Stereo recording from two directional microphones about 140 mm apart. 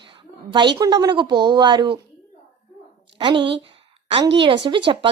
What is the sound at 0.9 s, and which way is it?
A woman's voice, 35° right (ahead or behind).